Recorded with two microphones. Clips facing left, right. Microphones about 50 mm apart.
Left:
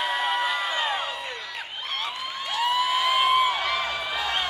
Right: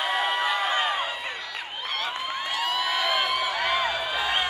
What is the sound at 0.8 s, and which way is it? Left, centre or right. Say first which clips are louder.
Music: right 1 dB; centre.